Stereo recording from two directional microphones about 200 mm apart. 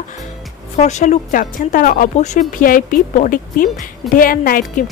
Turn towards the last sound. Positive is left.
turn(degrees=45)  # may be behind; listen again after turning